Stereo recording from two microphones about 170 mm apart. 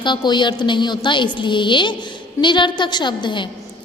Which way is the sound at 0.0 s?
25° left (ahead or behind).